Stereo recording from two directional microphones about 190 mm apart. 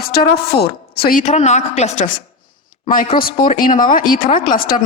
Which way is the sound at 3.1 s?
50° left (ahead or behind).